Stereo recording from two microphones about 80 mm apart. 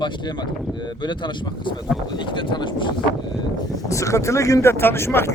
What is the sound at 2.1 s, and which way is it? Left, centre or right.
Speech, left.